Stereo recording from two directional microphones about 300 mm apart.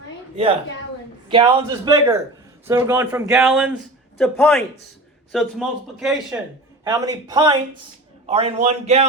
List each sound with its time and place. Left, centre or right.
1.3 s a man's voice: centre